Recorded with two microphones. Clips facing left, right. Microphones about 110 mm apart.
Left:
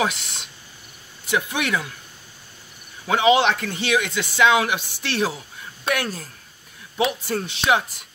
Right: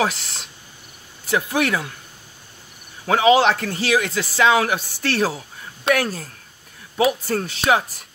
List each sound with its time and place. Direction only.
0.0 s speech: 35° right (ahead or behind)
3.1 s speech: 40° right (ahead or behind)